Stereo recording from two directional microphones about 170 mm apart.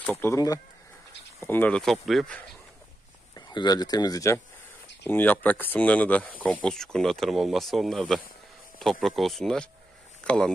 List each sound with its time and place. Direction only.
0.0 s speech: 15° left (ahead or behind)
3.3 s speech: 25° left (ahead or behind); by 10.5 s 5° left (ahead or behind)